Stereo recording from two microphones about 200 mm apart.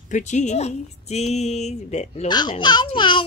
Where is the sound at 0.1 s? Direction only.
35° left (ahead or behind).